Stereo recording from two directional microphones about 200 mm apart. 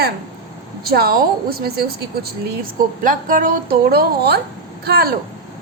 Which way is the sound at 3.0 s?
40° right (ahead or behind).